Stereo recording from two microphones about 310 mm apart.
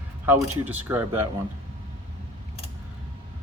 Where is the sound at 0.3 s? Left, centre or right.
Centre.